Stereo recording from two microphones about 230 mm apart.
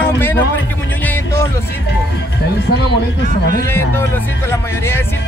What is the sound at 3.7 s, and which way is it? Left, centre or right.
Speech, centre.